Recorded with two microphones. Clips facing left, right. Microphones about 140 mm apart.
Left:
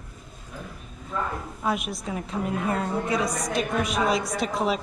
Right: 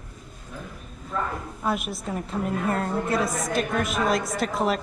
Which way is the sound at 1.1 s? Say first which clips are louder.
Right 1 dB; centre (ahead or behind).